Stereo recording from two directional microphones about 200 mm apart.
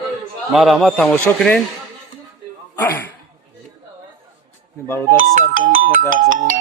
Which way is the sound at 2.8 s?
10° left (ahead or behind).